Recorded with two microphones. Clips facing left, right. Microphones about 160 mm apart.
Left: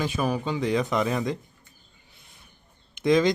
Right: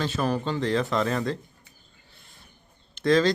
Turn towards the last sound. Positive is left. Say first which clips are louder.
# even
turn(degrees=15)  # may be behind; listen again after turning